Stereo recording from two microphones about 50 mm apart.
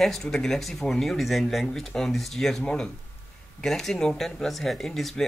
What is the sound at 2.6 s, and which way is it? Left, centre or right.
Speech, left.